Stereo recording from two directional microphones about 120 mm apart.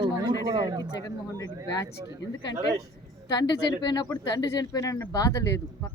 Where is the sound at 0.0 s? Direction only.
30° right (ahead or behind).